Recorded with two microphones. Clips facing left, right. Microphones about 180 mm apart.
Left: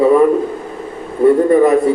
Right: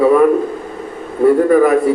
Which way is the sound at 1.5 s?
25° left (ahead or behind).